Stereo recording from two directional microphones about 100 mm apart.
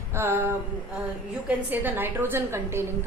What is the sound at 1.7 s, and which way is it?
A woman's voice, 20° right (ahead or behind).